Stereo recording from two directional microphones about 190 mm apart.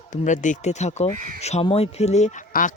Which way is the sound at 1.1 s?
45° right (ahead or behind).